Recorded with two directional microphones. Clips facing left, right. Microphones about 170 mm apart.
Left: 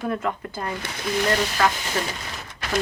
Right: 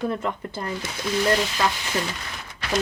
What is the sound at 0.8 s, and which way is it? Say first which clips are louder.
Speech: even; 60° left (ahead or behind).